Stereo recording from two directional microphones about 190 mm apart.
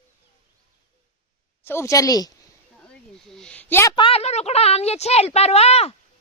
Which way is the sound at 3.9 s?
30° left (ahead or behind).